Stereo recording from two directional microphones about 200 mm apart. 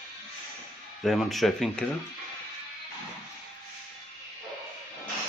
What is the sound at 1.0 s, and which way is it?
Speech, centre (ahead or behind).